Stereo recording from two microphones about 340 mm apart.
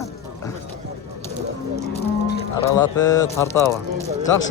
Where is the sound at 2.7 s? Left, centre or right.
Centre.